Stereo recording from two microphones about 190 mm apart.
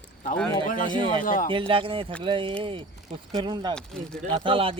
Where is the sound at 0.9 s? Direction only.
25° right (ahead or behind).